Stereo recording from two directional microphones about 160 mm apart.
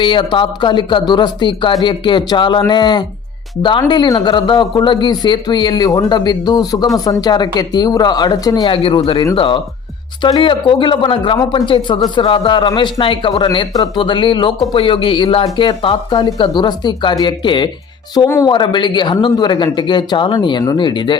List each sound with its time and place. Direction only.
0.0 s speech: 30° left (ahead or behind)